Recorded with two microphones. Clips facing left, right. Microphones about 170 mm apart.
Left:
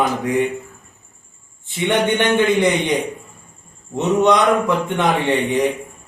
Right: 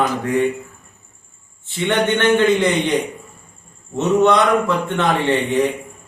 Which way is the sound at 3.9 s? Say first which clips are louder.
Right 1 dB; 15° left (ahead or behind).